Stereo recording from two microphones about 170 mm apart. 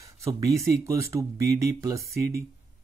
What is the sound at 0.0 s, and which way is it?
Speech, 20° right (ahead or behind).